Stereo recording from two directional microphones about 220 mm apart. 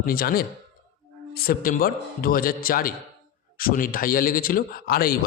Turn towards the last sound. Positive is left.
turn(degrees=40)  # may be behind; listen again after turning